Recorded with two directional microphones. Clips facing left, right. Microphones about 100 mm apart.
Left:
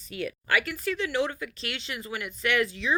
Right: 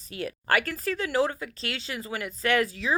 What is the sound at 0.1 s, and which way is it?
Speech, 30° right (ahead or behind).